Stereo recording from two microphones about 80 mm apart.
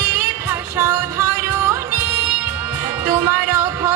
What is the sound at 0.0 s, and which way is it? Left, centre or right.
Music, right.